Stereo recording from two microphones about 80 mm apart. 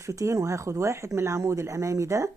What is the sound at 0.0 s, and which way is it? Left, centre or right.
Speech, right.